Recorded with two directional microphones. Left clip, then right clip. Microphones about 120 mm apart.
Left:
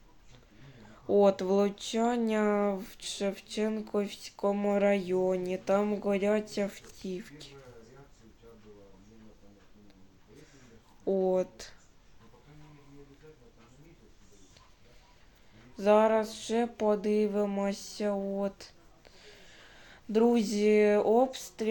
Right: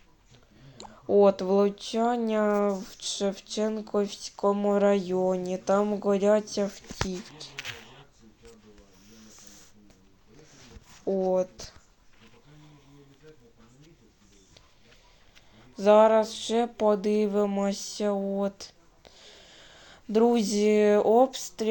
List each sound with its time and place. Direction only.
0.9 s speech: 15° right (ahead or behind)
11.0 s speech: 15° right (ahead or behind)
15.7 s a sound: 45° right (ahead or behind)